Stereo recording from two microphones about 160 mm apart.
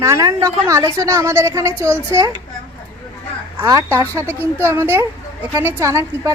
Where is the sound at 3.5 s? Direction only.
20° right (ahead or behind).